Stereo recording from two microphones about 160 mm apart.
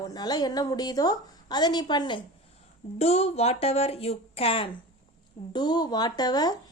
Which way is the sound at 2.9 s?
40° left (ahead or behind).